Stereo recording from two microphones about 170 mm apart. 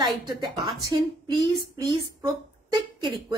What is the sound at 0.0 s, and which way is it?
A woman's voice, 25° right (ahead or behind).